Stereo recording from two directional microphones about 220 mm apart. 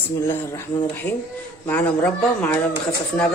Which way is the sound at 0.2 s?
10° left (ahead or behind).